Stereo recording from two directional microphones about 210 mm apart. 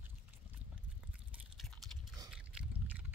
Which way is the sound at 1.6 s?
Centre (ahead or behind).